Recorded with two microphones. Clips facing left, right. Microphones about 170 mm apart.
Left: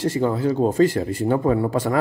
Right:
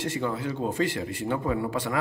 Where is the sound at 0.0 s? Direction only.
35° left (ahead or behind).